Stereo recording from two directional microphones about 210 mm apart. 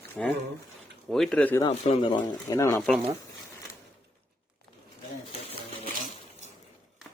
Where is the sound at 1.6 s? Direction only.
25° left (ahead or behind).